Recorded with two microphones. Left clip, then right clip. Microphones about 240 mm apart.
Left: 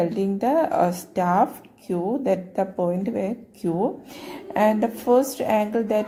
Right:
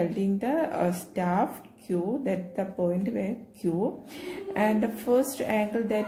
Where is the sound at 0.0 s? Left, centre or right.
Left.